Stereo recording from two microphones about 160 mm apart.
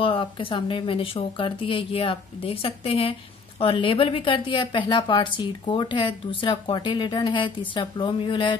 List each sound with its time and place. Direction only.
0.0 s speech: 35° left (ahead or behind)